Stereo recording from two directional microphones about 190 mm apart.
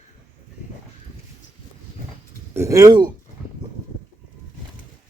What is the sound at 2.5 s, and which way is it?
Speech, 15° right (ahead or behind).